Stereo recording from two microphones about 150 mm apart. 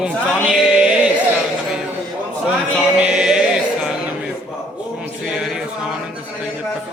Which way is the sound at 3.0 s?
5° right (ahead or behind).